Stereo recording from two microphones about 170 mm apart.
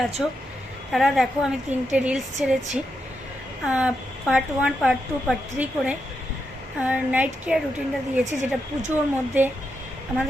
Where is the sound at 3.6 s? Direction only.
5° right (ahead or behind).